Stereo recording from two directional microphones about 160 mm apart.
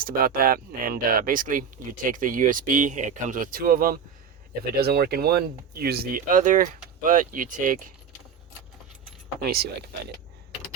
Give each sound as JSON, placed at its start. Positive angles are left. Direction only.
{"t": 0.0, "sound": "speech", "side_deg": -65}
{"t": 4.8, "sound": "speech", "side_deg": -80}
{"t": 9.4, "sound": "speech", "side_deg": -75}